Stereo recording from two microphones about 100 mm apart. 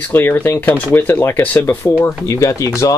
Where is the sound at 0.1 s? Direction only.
20° left (ahead or behind).